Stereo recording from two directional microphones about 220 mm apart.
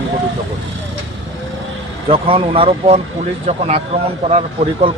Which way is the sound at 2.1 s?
25° right (ahead or behind).